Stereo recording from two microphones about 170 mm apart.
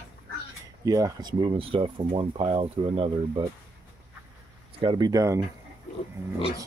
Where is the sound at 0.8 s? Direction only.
20° right (ahead or behind).